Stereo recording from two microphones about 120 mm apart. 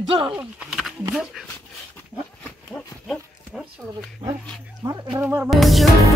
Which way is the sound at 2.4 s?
5° left (ahead or behind).